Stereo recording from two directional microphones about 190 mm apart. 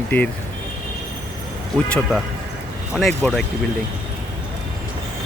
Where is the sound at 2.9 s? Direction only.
Centre (ahead or behind).